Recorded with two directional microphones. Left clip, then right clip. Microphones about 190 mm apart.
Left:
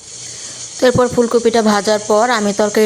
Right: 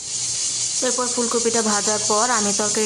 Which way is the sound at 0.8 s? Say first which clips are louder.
Left 13 dB; 30° left (ahead or behind).